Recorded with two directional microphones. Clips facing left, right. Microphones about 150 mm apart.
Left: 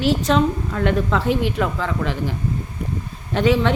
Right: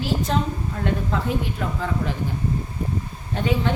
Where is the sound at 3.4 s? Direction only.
90° left.